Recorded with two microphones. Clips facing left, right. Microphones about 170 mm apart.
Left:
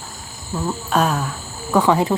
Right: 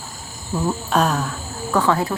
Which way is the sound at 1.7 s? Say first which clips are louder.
Left 3 dB; 15° left (ahead or behind).